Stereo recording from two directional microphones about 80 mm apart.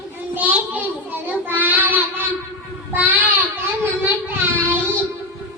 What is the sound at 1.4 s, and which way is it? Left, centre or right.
Child singing, right.